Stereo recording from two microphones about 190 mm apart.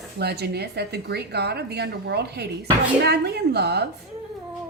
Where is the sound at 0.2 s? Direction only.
60° right (ahead or behind).